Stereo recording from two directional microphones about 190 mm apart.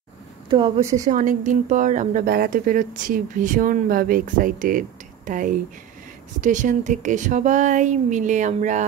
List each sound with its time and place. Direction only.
0.5 s speech: 25° right (ahead or behind)
1.0 s speech: 40° right (ahead or behind)
2.2 s speech: 55° right (ahead or behind)